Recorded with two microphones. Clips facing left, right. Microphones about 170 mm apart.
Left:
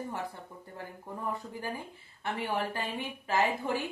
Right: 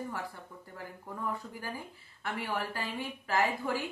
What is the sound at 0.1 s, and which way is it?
A woman's voice, 20° left (ahead or behind).